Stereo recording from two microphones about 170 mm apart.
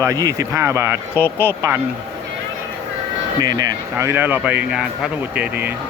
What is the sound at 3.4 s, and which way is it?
Speech, 20° right (ahead or behind).